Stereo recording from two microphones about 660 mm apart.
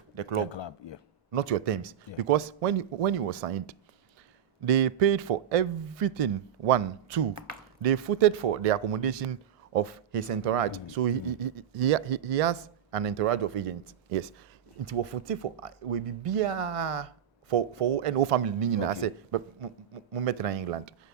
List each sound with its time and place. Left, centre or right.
0.5 s speech: left
1.3 s speech: right
4.6 s speech: right